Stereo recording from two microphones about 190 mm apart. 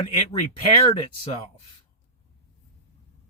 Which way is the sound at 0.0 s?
30° left (ahead or behind).